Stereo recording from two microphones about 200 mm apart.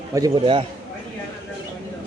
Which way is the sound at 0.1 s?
20° right (ahead or behind).